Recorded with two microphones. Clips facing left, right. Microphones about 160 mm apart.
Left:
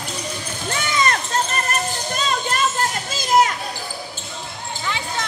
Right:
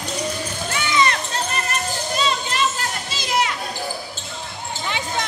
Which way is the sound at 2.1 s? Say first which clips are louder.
Even; 50° left (ahead or behind).